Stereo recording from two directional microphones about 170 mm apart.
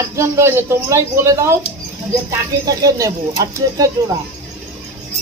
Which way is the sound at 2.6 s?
20° right (ahead or behind).